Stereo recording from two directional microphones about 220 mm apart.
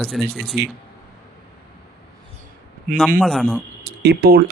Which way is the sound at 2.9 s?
35° right (ahead or behind).